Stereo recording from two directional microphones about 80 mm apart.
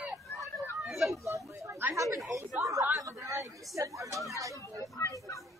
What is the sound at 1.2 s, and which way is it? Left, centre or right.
Speech, right.